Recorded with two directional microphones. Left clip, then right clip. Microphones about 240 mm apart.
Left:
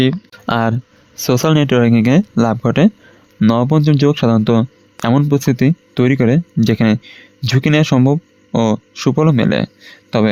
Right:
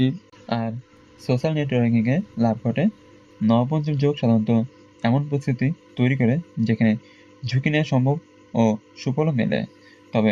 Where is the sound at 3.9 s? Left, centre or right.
Left.